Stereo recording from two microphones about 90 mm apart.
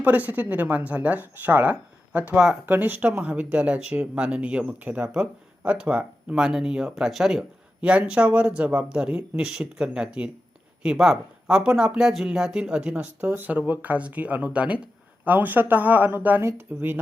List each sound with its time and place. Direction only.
0.0 s speech: 20° right (ahead or behind)
2.6 s speech: 20° right (ahead or behind); by 7.4 s 5° right (ahead or behind)
7.8 s speech: 15° right (ahead or behind)